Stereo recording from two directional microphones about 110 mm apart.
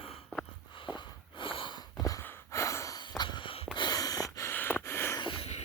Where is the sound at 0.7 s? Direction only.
45° left (ahead or behind).